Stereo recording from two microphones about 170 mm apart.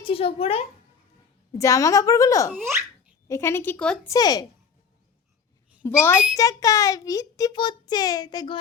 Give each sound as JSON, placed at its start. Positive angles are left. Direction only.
{"t": 0.0, "sound": "speech", "side_deg": 35}
{"t": 1.5, "sound": "a child's voice", "side_deg": 20}
{"t": 2.5, "sound": "baby laughter", "side_deg": -10}
{"t": 3.2, "sound": "a woman's voice", "side_deg": 15}
{"t": 4.1, "sound": "a child's voice", "side_deg": 20}
{"t": 5.8, "sound": "a woman's voice", "side_deg": 15}